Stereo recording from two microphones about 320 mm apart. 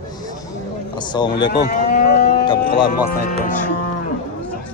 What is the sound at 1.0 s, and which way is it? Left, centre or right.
Speech, centre.